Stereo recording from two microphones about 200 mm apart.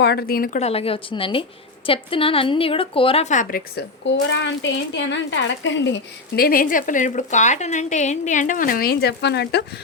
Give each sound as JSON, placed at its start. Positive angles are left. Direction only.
{"t": 0.0, "sound": "speech", "side_deg": 55}
{"t": 0.6, "sound": "a woman's voice", "side_deg": 30}
{"t": 3.8, "sound": "speech", "side_deg": 60}